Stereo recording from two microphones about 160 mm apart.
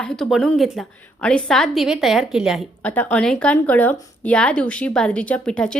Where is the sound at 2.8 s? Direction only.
10° left (ahead or behind).